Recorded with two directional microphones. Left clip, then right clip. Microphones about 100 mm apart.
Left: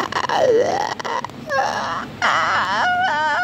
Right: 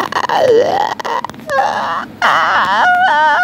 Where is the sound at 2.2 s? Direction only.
15° right (ahead or behind).